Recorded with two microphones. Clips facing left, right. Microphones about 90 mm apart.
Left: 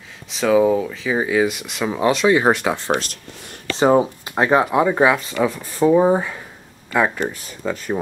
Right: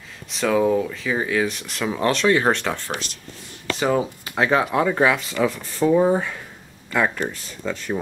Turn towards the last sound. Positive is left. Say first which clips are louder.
# left 3 dB
turn(degrees=5)  # may be behind; listen again after turning